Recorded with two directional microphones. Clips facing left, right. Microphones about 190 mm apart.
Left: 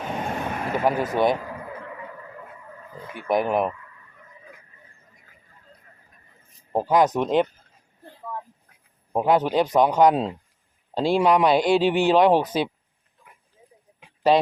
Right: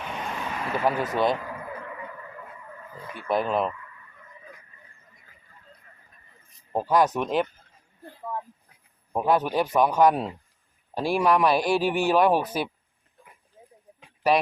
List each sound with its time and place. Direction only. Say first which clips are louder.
0.0 s vehicle: left 5 dB; 45° left (ahead or behind)
1.1 s speech: left 4 dB; 15° left (ahead or behind)
1.4 s a sound: left 1 dB; 30° left (ahead or behind)
3.1 s speech: left 3 dB; 15° left (ahead or behind)
6.7 s a man's voice: left 3 dB; 20° left (ahead or behind)
9.1 s a man's voice: left 3 dB; 20° left (ahead or behind)